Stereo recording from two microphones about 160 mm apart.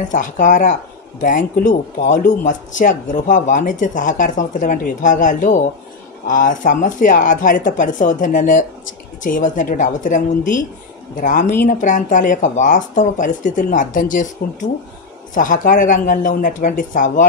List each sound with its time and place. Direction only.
0.1 s speech: 55° left (ahead or behind)